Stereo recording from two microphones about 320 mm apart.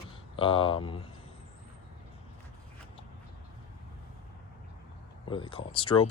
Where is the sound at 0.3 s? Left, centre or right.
Centre.